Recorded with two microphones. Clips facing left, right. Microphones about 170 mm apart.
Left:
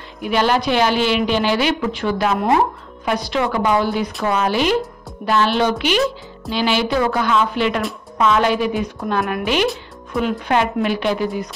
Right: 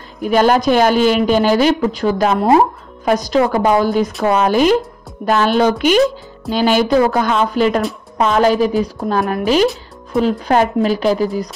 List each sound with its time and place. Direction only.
0.2 s a woman's voice: 45° right (ahead or behind)